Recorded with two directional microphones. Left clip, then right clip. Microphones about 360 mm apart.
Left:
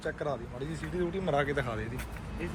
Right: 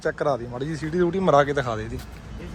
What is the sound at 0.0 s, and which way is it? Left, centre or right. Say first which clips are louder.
Speech: right 10 dB; centre.